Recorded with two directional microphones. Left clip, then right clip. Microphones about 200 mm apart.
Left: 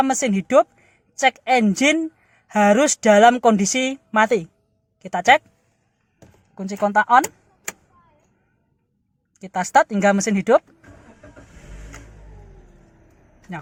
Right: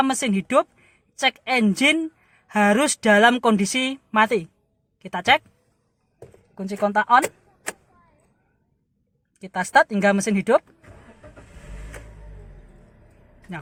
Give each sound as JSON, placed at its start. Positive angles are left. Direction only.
{"t": 0.0, "sound": "a woman's voice", "side_deg": 5}
{"t": 6.5, "sound": "speech", "side_deg": 5}
{"t": 9.4, "sound": "speech", "side_deg": 5}